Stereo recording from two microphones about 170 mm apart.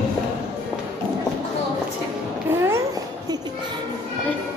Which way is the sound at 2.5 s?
15° right (ahead or behind).